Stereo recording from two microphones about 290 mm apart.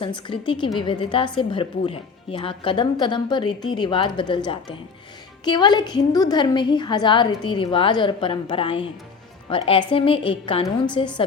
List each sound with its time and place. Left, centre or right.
0.0 s a woman's voice: centre